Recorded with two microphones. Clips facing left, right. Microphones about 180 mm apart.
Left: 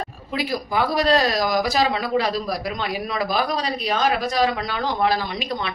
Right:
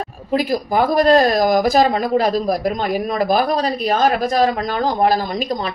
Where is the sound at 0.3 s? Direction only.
45° right (ahead or behind).